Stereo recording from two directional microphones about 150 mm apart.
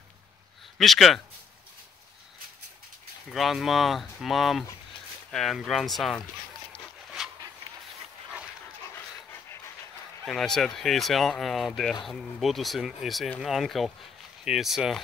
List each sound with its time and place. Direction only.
0.7 s speech: centre (ahead or behind)
3.3 s speech: centre (ahead or behind)
8.9 s dog: 15° left (ahead or behind)
10.2 s speech: 5° left (ahead or behind)